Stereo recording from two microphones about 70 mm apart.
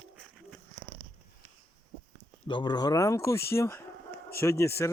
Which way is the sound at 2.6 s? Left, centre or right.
Left.